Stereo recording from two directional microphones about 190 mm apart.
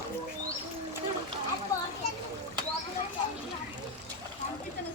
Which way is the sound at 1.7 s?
15° left (ahead or behind).